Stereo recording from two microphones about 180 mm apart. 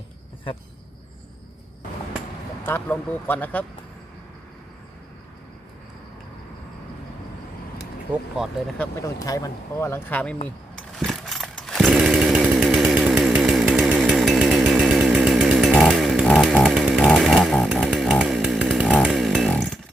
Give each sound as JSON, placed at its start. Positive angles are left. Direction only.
{"t": 2.6, "sound": "speech", "side_deg": 10}
{"t": 9.0, "sound": "speech", "side_deg": 15}
{"t": 10.9, "sound": "chainsaw", "side_deg": 0}